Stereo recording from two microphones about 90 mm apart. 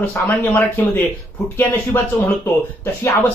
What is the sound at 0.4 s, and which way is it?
Speech, 20° left (ahead or behind).